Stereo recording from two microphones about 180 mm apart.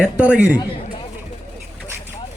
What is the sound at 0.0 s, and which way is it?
Speech, 10° right (ahead or behind).